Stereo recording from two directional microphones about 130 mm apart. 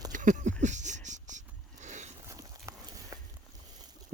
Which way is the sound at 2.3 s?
25° right (ahead or behind).